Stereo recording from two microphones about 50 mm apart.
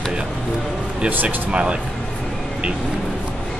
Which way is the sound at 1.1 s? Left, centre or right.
Right.